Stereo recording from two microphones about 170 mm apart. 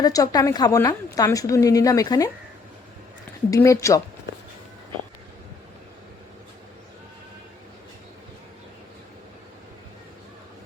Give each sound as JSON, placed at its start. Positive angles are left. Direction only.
{"t": 0.0, "sound": "a woman's voice", "side_deg": 20}
{"t": 3.5, "sound": "speech", "side_deg": 20}